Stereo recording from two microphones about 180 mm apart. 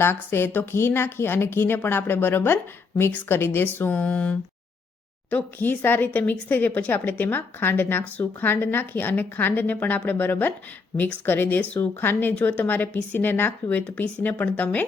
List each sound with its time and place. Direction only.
0.0 s a woman's voice: 15° left (ahead or behind)